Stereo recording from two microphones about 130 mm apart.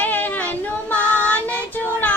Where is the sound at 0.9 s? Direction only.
10° left (ahead or behind).